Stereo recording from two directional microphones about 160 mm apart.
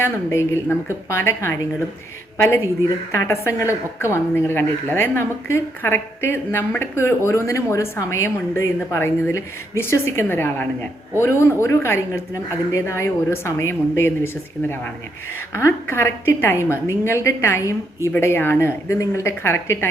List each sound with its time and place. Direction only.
0.0 s a woman's voice: 15° left (ahead or behind)
3.1 s a woman's voice: 20° left (ahead or behind)
15.5 s a woman's voice: 15° left (ahead or behind)